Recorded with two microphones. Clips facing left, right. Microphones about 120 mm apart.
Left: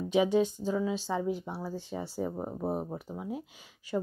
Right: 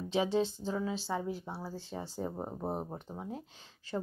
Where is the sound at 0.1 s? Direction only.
15° left (ahead or behind).